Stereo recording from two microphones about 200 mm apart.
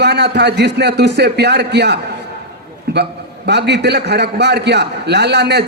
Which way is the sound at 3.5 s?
55° right (ahead or behind).